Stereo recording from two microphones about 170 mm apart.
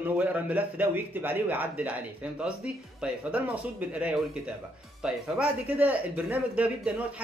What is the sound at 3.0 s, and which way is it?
Speech, 10° right (ahead or behind).